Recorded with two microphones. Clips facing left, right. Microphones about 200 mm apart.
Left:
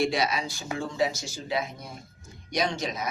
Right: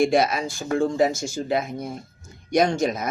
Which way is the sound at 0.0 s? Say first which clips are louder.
Right 7 dB; 50° right (ahead or behind).